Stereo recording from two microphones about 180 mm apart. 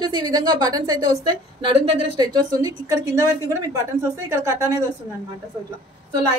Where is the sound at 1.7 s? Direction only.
30° right (ahead or behind); by 4.9 s 15° right (ahead or behind).